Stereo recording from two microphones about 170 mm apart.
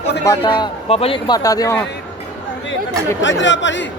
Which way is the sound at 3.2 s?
90° left.